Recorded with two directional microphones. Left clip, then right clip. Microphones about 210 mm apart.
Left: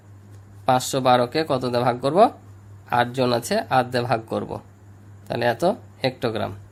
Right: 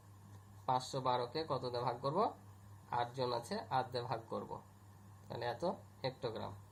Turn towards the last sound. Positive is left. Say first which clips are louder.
# left 18 dB
turn(degrees=55)  # may be behind; listen again after turning